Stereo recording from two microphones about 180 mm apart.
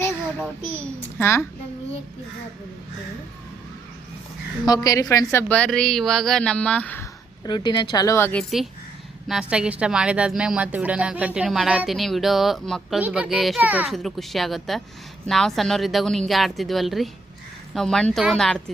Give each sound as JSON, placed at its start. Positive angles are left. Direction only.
{"t": 0.4, "sound": "a woman's voice", "side_deg": 10}
{"t": 4.6, "sound": "a woman's voice", "side_deg": 20}
{"t": 7.4, "sound": "a woman's voice", "side_deg": 25}